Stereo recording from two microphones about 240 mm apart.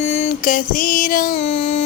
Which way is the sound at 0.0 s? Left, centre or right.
Left.